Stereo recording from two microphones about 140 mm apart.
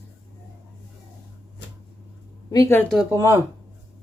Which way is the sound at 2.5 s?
25° left (ahead or behind).